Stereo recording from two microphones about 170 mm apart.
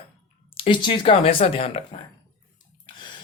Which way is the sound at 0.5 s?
30° left (ahead or behind).